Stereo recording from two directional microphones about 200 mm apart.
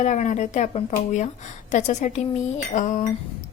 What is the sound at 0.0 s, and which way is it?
Speech, 35° left (ahead or behind).